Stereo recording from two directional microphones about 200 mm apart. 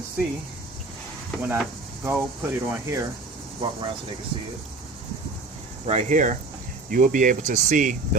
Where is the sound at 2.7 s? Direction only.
15° right (ahead or behind).